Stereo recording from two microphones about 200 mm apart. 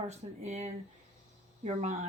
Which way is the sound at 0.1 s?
35° right (ahead or behind).